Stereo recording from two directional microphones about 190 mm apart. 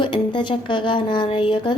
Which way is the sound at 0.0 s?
25° left (ahead or behind).